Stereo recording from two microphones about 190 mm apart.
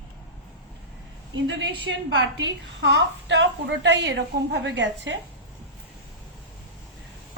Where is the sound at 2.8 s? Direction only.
65° right (ahead or behind).